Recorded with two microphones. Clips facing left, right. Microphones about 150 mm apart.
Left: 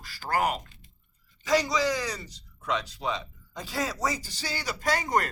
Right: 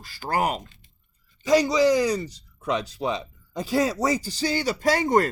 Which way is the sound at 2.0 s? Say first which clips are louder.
Right 11 dB; 35° right (ahead or behind).